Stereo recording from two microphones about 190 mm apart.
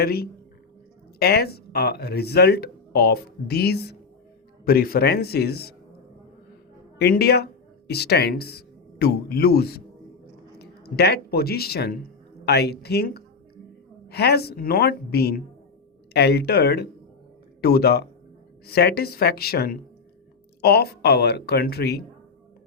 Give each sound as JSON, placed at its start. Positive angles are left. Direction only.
{"t": 0.0, "sound": "a woman's voice", "side_deg": 55}
{"t": 7.0, "sound": "speech", "side_deg": 55}